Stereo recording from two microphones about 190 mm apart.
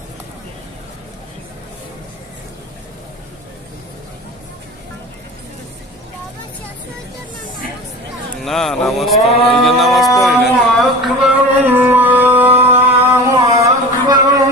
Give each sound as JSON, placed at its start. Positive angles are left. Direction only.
{"t": 8.4, "sound": "speech", "side_deg": 0}
{"t": 9.3, "sound": "a sound", "side_deg": 30}
{"t": 9.6, "sound": "speech", "side_deg": 0}
{"t": 10.2, "sound": "music", "side_deg": 0}